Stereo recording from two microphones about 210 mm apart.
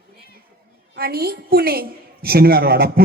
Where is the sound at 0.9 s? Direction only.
45° right (ahead or behind).